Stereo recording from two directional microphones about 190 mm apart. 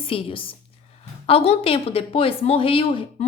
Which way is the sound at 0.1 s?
30° left (ahead or behind).